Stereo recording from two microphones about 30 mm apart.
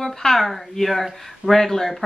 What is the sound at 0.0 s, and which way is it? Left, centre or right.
Speech, centre.